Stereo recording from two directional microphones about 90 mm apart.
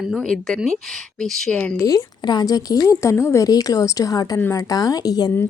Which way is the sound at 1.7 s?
45° left (ahead or behind).